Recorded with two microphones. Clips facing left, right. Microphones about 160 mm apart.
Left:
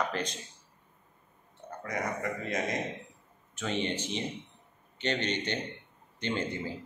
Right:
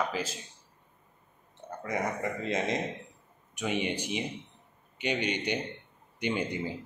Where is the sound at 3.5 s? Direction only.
10° right (ahead or behind).